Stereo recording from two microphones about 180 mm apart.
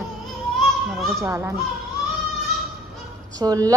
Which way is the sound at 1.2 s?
15° right (ahead or behind).